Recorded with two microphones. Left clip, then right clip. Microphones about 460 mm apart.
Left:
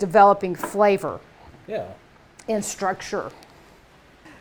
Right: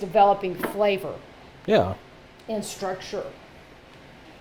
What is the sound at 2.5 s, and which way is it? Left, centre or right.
Speech, left.